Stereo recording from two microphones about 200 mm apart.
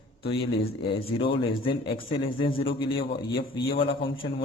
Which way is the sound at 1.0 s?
30° left (ahead or behind).